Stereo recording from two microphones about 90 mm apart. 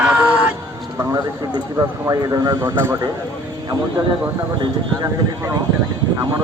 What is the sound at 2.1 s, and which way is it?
Speech, 40° right (ahead or behind).